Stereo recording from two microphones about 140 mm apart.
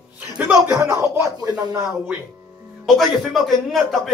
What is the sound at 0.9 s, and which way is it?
Speech, 20° right (ahead or behind).